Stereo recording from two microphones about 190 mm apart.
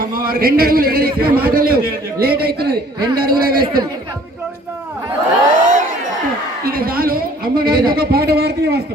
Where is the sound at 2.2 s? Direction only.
55° right (ahead or behind).